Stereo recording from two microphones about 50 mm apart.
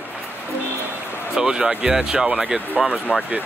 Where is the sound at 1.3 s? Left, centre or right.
Centre.